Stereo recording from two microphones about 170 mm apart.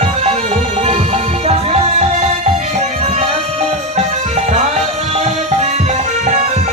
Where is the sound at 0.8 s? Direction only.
40° right (ahead or behind).